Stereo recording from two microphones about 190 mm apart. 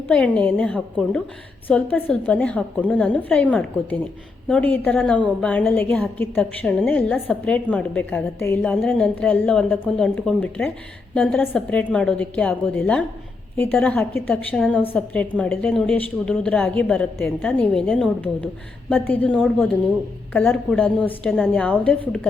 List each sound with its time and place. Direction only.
0.1 s a woman's voice: 5° left (ahead or behind)